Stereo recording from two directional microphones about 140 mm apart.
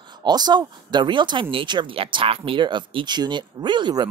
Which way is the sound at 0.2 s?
30° right (ahead or behind).